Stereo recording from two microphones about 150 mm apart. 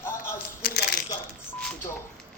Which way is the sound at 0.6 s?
90° left.